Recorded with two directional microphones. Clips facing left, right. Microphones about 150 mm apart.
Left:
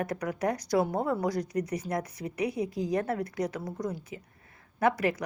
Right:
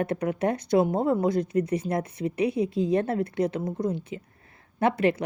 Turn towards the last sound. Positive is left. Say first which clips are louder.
# right 4 dB
turn(degrees=-25)  # may be behind; listen again after turning